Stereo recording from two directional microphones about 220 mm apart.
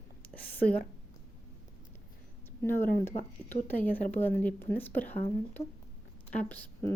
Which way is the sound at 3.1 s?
25° left (ahead or behind).